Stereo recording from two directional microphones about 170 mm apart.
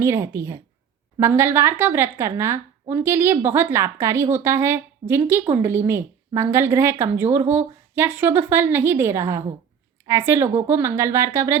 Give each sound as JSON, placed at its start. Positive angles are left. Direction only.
{"t": 0.0, "sound": "a woman's voice", "side_deg": -15}